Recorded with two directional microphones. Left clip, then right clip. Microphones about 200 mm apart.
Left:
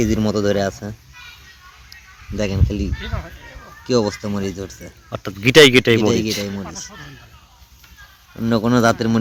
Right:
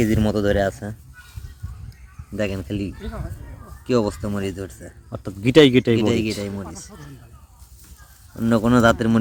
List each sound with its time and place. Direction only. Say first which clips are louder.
0.0 s speech: left 2 dB; 25° left (ahead or behind)
2.4 s speech: left 2 dB; 35° left (ahead or behind)
5.1 s speech: left 4 dB; 5° left (ahead or behind)
6.0 s speech: left 3 dB; 30° left (ahead or behind)
8.4 s speech: left 1 dB; 15° left (ahead or behind)